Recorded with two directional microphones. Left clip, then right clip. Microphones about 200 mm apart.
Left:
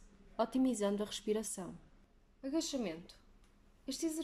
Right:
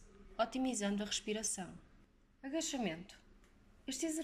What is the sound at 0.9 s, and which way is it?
Speech, 30° left (ahead or behind).